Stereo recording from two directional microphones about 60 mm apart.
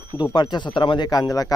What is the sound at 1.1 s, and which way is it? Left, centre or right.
Speech, left.